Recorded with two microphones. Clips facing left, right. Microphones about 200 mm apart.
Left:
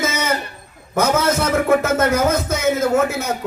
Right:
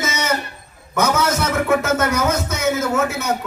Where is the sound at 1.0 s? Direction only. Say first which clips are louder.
Left 1 dB; 30° left (ahead or behind).